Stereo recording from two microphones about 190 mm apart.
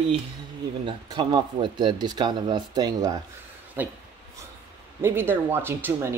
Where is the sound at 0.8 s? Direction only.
20° right (ahead or behind).